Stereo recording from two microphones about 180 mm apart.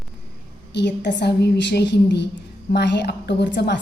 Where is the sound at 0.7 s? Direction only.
70° left (ahead or behind).